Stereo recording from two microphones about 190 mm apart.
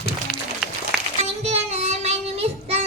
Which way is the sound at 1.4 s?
35° right (ahead or behind).